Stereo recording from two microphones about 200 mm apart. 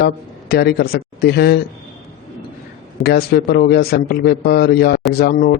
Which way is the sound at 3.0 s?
55° left (ahead or behind).